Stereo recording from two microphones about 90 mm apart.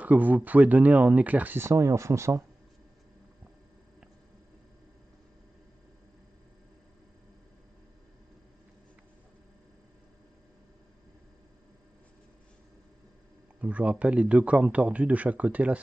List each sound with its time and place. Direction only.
0.0 s speech: 20° right (ahead or behind)
1.7 s speech: 35° right (ahead or behind)
13.6 s speech: 15° right (ahead or behind)